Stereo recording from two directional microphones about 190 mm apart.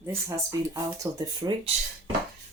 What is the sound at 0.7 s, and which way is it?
Speech, 20° right (ahead or behind).